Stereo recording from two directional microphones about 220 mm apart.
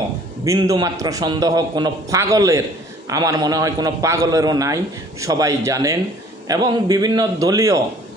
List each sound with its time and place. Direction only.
0.5 s a man's voice: 15° right (ahead or behind)